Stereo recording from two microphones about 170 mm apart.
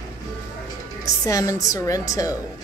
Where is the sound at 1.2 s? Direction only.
20° left (ahead or behind).